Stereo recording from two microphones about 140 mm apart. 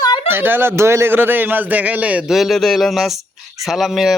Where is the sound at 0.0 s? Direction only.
30° left (ahead or behind).